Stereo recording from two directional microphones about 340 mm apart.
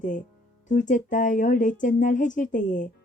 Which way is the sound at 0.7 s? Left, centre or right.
Left.